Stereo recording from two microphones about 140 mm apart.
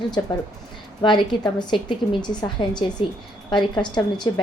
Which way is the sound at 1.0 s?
30° left (ahead or behind).